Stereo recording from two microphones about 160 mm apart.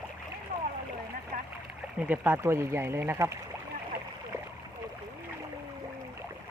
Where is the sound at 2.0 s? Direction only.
10° right (ahead or behind).